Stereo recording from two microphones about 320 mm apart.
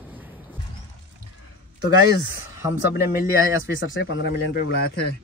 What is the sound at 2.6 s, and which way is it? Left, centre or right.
Speech, centre.